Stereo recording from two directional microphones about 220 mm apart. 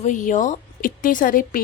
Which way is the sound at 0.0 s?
35° left (ahead or behind).